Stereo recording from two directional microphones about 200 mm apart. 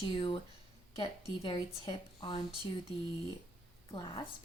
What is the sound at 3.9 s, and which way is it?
Speech, 25° left (ahead or behind).